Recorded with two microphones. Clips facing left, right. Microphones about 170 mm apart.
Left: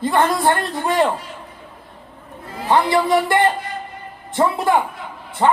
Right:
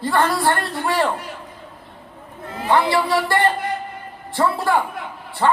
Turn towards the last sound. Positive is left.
turn(degrees=20)  # may be behind; listen again after turning